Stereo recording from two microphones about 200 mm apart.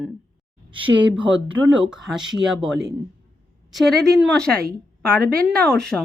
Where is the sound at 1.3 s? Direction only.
70° right (ahead or behind).